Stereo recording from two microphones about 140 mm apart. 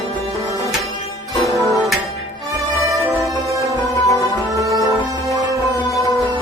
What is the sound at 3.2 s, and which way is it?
Music, 20° right (ahead or behind).